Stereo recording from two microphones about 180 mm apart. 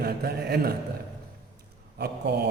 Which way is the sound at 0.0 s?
60° right (ahead or behind).